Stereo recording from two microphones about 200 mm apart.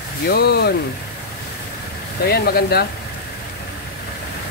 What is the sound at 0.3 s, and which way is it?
Speech, 55° left (ahead or behind).